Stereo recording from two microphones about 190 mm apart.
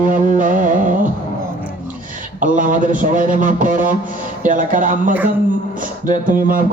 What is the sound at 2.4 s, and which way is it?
Speech, 45° right (ahead or behind).